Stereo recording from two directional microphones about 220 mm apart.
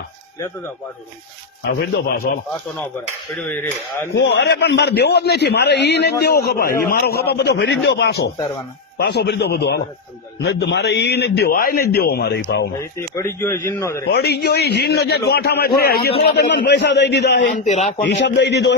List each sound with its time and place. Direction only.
1.6 s a man's voice: 45° left (ahead or behind)
3.3 s speech: 5° left (ahead or behind)
4.1 s a man's voice: 45° left (ahead or behind)
12.8 s speech: 10° left (ahead or behind)
14.1 s a man's voice: 45° left (ahead or behind)
17.4 s a man's voice: 35° left (ahead or behind)
18.0 s a man's voice: 55° left (ahead or behind)